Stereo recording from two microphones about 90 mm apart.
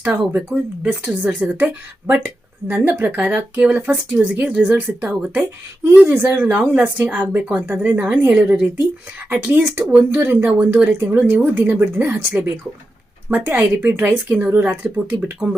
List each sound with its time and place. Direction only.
0.3 s speech: 15° right (ahead or behind)